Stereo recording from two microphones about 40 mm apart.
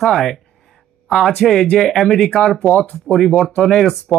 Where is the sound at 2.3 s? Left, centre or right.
Left.